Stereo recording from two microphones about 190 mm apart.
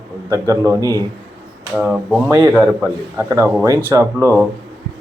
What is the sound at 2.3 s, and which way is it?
Speech, 20° right (ahead or behind).